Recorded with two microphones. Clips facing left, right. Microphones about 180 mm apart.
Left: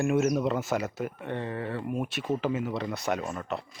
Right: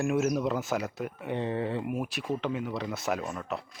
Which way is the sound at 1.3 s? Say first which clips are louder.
Right 5 dB; 20° right (ahead or behind).